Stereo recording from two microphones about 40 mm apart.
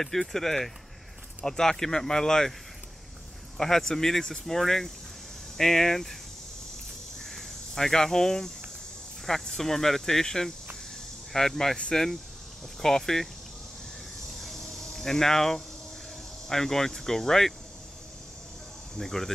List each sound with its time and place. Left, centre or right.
0.0 s speech: centre
3.5 s speech: centre
7.2 s snake: centre
9.2 s speech: centre
14.2 s cricket: centre
16.4 s speech: centre
18.9 s speech: centre